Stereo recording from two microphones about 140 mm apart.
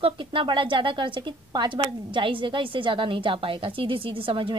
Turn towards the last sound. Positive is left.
turn(degrees=-40)  # may be behind; listen again after turning